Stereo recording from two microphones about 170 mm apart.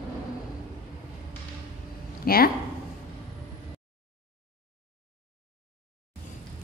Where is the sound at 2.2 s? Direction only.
60° left (ahead or behind).